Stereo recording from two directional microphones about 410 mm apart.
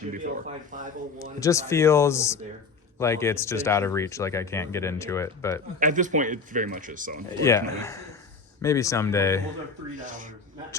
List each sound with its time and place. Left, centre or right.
0.1 s a man's voice: centre
1.4 s speech: centre
5.8 s a man's voice: centre
7.4 s speech: centre
10.0 s a man's voice: centre